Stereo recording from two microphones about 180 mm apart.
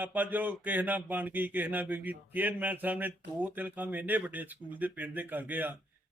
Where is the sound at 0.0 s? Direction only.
10° right (ahead or behind).